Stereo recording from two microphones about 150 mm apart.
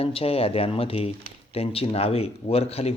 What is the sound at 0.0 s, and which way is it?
Speech, 40° left (ahead or behind).